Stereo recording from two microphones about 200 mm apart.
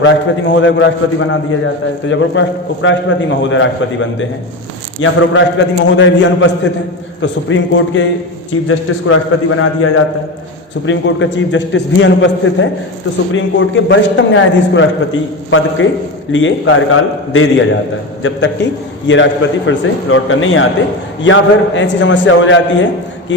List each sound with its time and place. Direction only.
0.5 s a man's voice: 70° left (ahead or behind)
8.6 s a man's voice: 90° left
10.8 s a man's voice: 70° left (ahead or behind)
18.2 s a man's voice: 65° left (ahead or behind)